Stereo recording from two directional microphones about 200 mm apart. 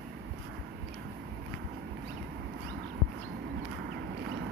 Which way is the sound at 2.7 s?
55° right (ahead or behind).